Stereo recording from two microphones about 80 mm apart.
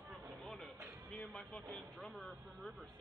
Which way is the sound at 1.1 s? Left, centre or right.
Centre.